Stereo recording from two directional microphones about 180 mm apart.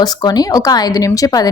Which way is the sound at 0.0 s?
20° left (ahead or behind).